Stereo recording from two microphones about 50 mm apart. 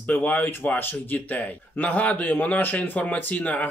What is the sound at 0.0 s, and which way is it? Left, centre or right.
Speech, left.